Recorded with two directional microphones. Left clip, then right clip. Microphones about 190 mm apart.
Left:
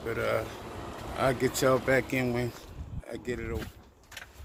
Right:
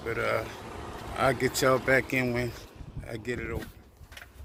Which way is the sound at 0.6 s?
45° left (ahead or behind).